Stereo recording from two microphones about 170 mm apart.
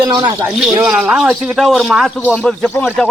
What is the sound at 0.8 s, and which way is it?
A man's voice, 5° right (ahead or behind).